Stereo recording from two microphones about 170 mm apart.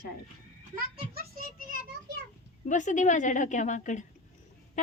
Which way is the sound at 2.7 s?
45° left (ahead or behind).